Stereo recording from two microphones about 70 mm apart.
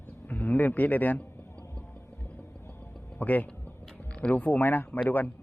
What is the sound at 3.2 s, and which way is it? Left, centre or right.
A man's voice, left.